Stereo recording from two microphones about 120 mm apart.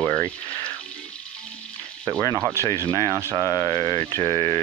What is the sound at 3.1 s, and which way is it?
Speech, 25° right (ahead or behind).